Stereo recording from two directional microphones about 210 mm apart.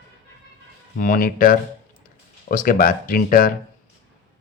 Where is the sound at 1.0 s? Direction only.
45° left (ahead or behind).